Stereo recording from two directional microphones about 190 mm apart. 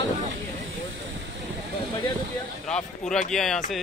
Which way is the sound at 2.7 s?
5° left (ahead or behind).